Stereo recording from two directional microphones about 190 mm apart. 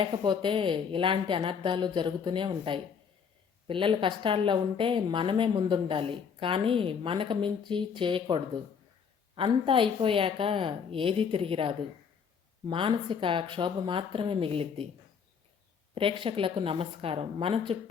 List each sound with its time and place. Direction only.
0.0 s a woman's voice: 25° right (ahead or behind)
16.0 s a woman's voice: 30° right (ahead or behind)